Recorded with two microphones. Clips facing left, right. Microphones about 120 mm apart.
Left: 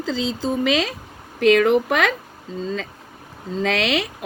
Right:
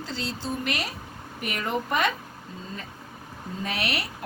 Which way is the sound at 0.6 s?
90° left.